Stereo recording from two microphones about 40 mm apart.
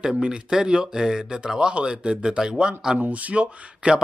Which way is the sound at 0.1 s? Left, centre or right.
Right.